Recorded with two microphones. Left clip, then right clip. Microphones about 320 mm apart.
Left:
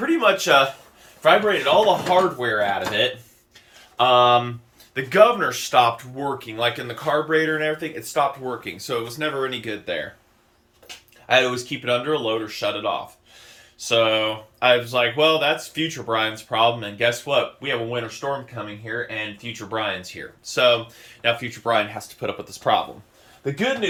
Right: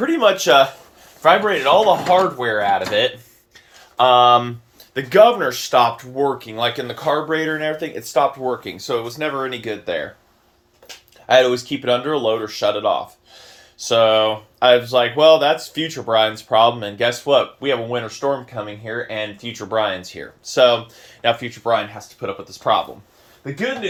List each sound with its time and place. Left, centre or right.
0.0 s speech: right
1.2 s speech: centre